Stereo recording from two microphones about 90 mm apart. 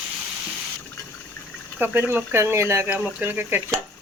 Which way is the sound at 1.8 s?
20° right (ahead or behind).